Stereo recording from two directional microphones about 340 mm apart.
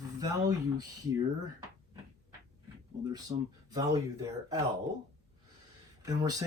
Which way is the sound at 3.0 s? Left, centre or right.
Centre.